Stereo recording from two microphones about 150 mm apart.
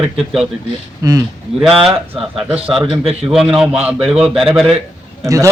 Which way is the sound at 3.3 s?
5° right (ahead or behind).